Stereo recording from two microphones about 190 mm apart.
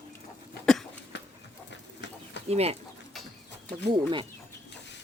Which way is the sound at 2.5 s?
30° right (ahead or behind).